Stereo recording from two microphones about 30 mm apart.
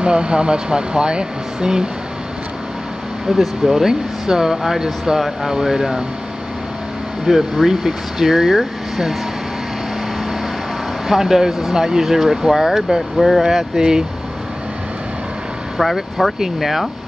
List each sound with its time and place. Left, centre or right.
0.0 s speech: right
3.3 s speech: centre
7.3 s speech: centre
11.1 s speech: centre
15.8 s speech: centre